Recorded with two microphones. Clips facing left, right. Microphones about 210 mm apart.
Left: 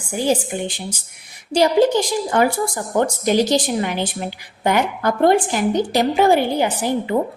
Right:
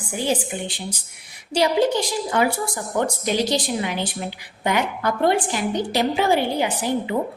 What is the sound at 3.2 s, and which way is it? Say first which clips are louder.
A woman's voice: left 5 dB; 45° left (ahead or behind).